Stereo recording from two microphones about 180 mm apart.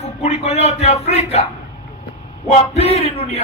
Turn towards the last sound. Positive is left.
turn(degrees=35)  # may be behind; listen again after turning